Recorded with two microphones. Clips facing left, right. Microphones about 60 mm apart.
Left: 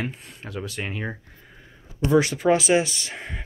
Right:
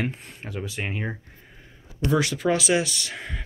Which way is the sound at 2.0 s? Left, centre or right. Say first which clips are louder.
Left 3 dB; left.